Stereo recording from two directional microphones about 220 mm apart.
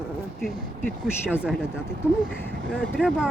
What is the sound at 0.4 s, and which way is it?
Speech, centre (ahead or behind).